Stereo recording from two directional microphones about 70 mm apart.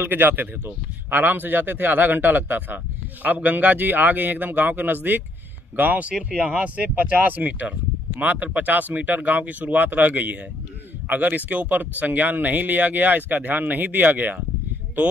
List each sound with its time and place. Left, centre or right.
0.0 s speech: right